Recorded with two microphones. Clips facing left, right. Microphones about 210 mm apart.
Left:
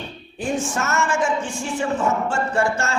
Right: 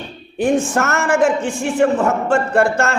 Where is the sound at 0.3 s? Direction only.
60° right (ahead or behind).